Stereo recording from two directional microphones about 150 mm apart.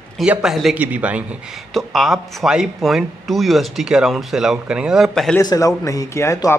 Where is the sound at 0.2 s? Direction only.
5° right (ahead or behind).